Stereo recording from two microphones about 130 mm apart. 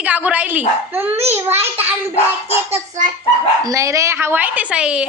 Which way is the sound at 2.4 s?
55° right (ahead or behind).